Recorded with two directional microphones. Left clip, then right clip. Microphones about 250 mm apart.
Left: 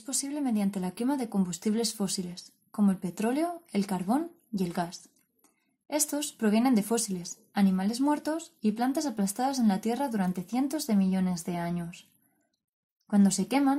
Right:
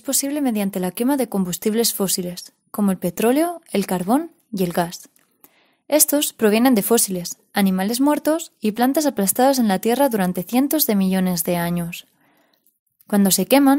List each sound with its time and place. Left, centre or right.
0.0 s speech: right